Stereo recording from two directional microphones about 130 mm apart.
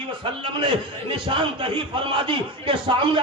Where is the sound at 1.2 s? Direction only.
40° right (ahead or behind).